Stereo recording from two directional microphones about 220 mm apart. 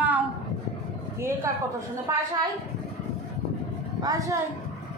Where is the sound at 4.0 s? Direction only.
15° right (ahead or behind).